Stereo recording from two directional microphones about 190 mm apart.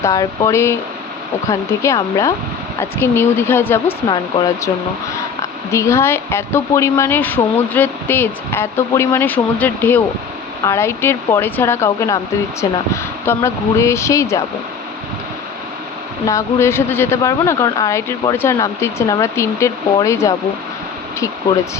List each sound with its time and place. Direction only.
0.0 s a woman's voice: 20° left (ahead or behind)
4.1 s speech: 20° left (ahead or behind)
5.7 s a woman's voice: 15° left (ahead or behind)
16.2 s a woman's voice: 15° left (ahead or behind)